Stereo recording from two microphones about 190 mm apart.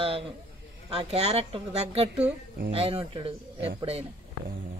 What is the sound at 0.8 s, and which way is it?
A man's voice, 30° right (ahead or behind).